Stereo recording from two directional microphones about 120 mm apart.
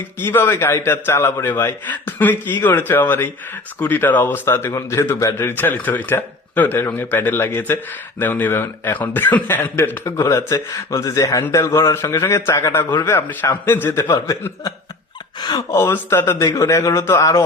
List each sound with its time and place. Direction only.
0.2 s a man's voice: 15° left (ahead or behind)
10.2 s a man's voice: 30° left (ahead or behind)
15.4 s speech: 30° left (ahead or behind)